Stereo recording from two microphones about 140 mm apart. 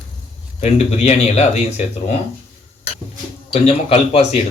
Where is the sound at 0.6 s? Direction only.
50° left (ahead or behind).